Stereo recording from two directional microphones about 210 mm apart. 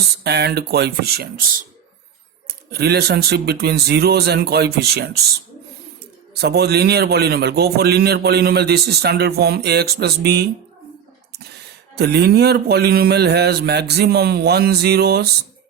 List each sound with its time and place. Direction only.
0.3 s a man's voice: 50° right (ahead or behind)
2.7 s a man's voice: 50° right (ahead or behind)
6.4 s a man's voice: 50° right (ahead or behind)
11.9 s a man's voice: 50° right (ahead or behind)